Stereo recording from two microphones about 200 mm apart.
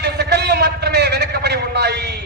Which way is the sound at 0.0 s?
55° right (ahead or behind).